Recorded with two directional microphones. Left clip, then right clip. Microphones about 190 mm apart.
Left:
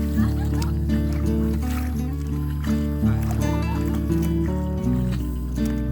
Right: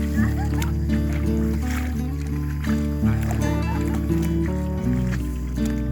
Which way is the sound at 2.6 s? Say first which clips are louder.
Even; centre (ahead or behind).